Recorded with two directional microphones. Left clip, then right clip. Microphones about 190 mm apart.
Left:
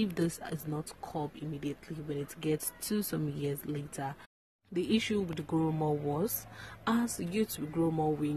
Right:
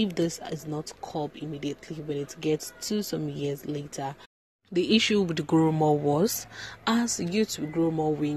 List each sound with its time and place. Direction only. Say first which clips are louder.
0.0 s speech: right 6 dB; centre (ahead or behind)
4.7 s speech: right 8 dB; 20° right (ahead or behind)
6.8 s speech: right 6 dB; 15° right (ahead or behind)